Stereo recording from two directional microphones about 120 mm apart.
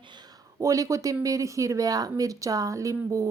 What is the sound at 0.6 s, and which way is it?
Speech, 25° right (ahead or behind).